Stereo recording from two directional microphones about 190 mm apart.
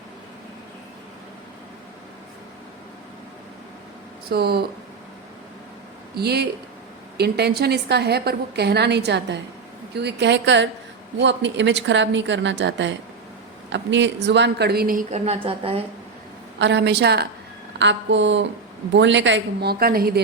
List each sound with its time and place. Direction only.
4.3 s a woman's voice: 55° right (ahead or behind)
6.1 s a woman's voice: 60° right (ahead or behind)
15.2 s a woman's voice: 30° right (ahead or behind)
16.6 s a woman's voice: 65° right (ahead or behind)
17.7 s a woman's voice: 70° right (ahead or behind); by 20.1 s 50° right (ahead or behind)